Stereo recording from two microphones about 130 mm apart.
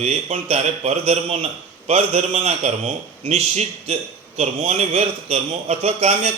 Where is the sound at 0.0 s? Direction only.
55° right (ahead or behind).